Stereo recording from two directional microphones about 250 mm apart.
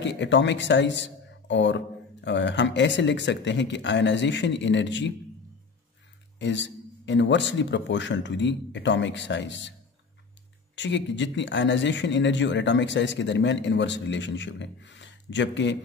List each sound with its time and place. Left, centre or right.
0.0 s speech: left
6.4 s speech: left
10.8 s speech: left